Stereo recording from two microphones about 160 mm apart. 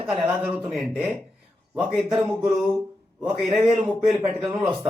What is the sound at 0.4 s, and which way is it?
A man's voice, 10° right (ahead or behind).